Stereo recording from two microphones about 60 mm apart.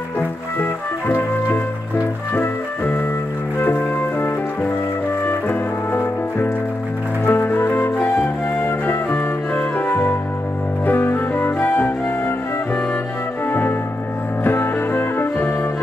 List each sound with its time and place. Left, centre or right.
0.6 s music: left
7.2 s flute: left
10.9 s music: left
13.5 s music: left